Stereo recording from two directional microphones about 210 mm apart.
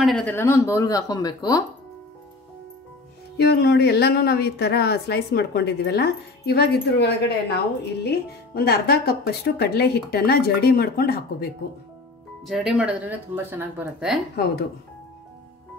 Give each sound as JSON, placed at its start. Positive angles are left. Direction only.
{"t": 0.0, "sound": "speech", "side_deg": 5}
{"t": 3.3, "sound": "speech", "side_deg": 50}
{"t": 12.4, "sound": "speech", "side_deg": 0}
{"t": 14.3, "sound": "speech", "side_deg": 50}